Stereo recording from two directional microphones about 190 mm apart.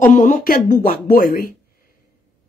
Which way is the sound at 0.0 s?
45° left (ahead or behind).